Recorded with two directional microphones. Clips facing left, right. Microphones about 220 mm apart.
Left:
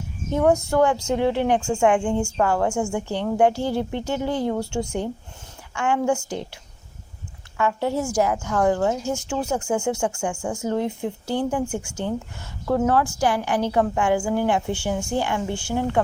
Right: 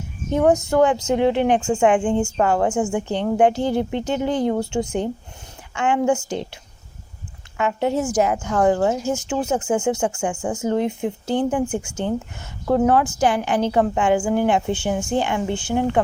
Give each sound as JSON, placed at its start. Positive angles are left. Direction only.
{"t": 0.3, "sound": "a woman's voice", "side_deg": -20}
{"t": 7.5, "sound": "a woman's voice", "side_deg": -20}